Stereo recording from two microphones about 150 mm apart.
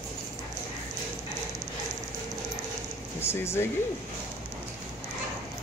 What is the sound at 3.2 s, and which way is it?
Speech, 15° left (ahead or behind).